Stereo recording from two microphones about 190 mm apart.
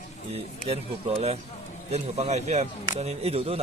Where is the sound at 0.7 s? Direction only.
30° right (ahead or behind).